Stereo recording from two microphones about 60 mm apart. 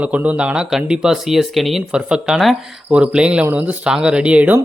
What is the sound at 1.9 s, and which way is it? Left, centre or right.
A man's voice, centre.